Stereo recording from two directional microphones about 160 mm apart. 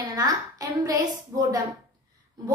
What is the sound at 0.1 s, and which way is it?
Speech, 25° right (ahead or behind).